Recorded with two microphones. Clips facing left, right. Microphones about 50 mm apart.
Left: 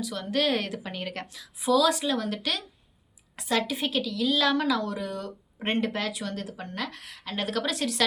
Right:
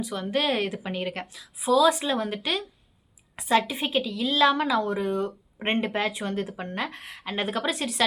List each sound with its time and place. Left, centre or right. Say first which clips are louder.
0.0 s a woman's voice: right 1 dB; centre